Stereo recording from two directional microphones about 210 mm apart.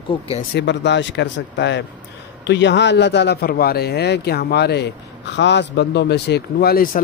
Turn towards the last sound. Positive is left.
turn(degrees=50)  # may be behind; listen again after turning